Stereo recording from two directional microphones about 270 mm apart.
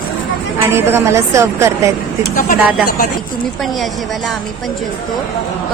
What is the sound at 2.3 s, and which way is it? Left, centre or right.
Speech, left.